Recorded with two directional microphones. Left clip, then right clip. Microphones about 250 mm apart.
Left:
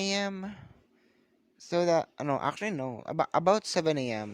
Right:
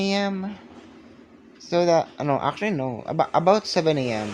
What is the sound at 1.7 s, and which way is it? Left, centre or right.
Speech, left.